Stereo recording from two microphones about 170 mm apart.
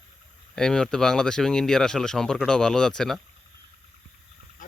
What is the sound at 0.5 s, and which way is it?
Speech, 5° left (ahead or behind).